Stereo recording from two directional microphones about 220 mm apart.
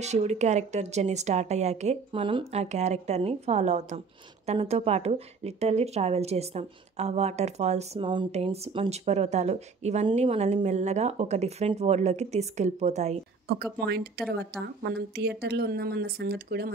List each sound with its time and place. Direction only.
0.0 s a woman's voice: 30° right (ahead or behind)
13.7 s speech: 45° right (ahead or behind)